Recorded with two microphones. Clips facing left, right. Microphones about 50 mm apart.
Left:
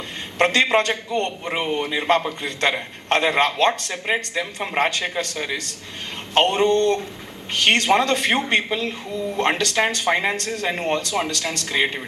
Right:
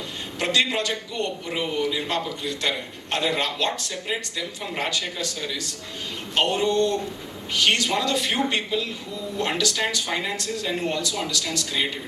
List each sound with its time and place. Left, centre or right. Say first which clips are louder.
0.3 s a man's voice: left 6 dB; left